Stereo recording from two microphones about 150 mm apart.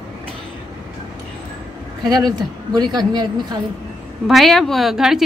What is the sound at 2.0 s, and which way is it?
Speech, 25° right (ahead or behind).